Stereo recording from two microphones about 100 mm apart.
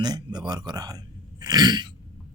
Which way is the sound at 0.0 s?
45° right (ahead or behind).